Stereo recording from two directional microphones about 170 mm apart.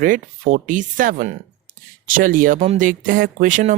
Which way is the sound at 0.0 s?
50° right (ahead or behind).